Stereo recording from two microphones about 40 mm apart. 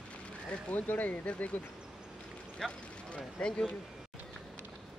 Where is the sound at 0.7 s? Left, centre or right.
Left.